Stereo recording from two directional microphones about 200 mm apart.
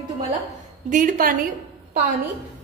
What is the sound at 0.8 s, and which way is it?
Speech, 40° right (ahead or behind).